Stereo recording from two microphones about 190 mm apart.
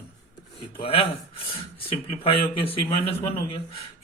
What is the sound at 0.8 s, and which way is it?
Rub, 30° left (ahead or behind).